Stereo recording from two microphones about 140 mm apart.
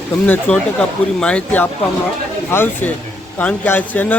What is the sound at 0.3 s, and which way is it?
Speech, 10° left (ahead or behind).